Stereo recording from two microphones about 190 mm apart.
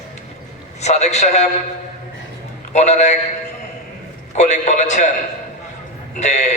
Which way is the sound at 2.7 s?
35° left (ahead or behind).